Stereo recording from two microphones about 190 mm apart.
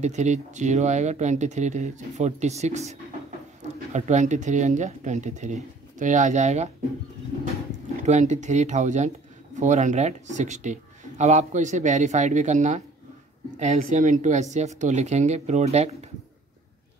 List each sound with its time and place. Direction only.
0.0 s speech: 35° right (ahead or behind)
7.7 s speech: 40° right (ahead or behind)